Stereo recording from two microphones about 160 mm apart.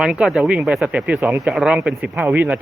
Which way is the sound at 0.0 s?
5° right (ahead or behind).